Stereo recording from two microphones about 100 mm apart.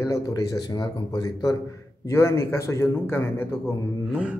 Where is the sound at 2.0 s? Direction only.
30° left (ahead or behind).